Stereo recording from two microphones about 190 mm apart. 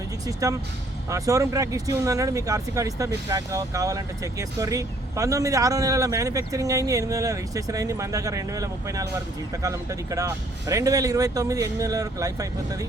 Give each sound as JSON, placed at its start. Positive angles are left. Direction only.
{"t": 0.3, "sound": "speech", "side_deg": -15}